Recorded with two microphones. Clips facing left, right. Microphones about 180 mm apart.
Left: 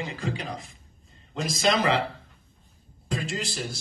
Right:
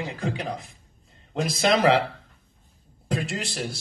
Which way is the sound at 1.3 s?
60° right (ahead or behind).